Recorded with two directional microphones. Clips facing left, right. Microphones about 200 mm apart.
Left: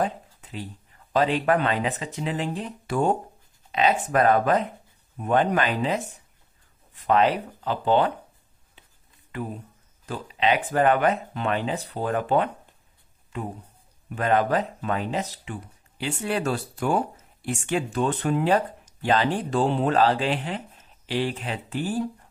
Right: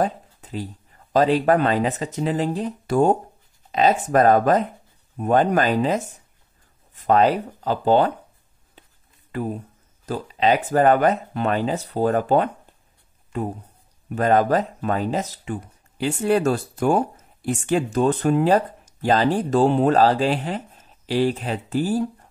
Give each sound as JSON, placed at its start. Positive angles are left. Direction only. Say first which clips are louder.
{"t": 0.0, "sound": "speech", "louder": "right 4 dB", "side_deg": -40}
{"t": 7.1, "sound": "speech", "louder": "right 3 dB", "side_deg": -40}
{"t": 10.0, "sound": "speech", "louder": "right 4 dB", "side_deg": -40}
{"t": 14.0, "sound": "speech", "louder": "right 4 dB", "side_deg": -40}